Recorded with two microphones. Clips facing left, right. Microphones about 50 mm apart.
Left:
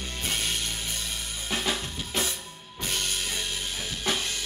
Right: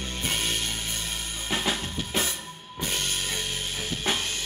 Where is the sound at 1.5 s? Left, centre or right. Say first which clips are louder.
Right 1 dB; right.